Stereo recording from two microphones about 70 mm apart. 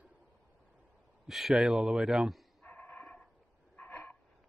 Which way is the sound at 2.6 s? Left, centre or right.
Left.